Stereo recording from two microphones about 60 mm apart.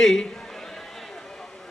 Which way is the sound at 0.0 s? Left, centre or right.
Centre.